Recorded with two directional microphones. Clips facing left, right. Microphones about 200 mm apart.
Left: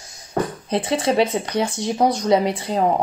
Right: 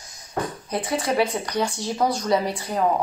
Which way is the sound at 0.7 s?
25° left (ahead or behind).